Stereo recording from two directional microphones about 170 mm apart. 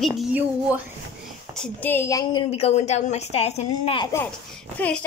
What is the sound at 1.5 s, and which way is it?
Speech, 5° left (ahead or behind).